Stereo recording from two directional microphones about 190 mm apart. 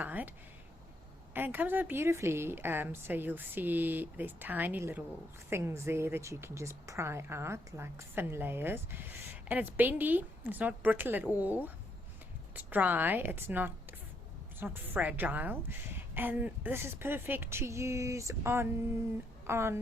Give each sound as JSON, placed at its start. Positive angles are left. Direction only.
{"t": 0.0, "sound": "speech", "side_deg": -10}